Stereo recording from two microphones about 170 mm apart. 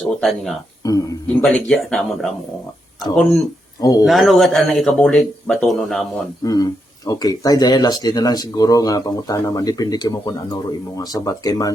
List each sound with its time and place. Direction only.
0.0 s speech: centre (ahead or behind)
0.8 s speech: 20° left (ahead or behind)
1.4 s speech: 5° left (ahead or behind)
3.8 s speech: 20° left (ahead or behind)
4.0 s speech: centre (ahead or behind)
6.4 s speech: 20° left (ahead or behind)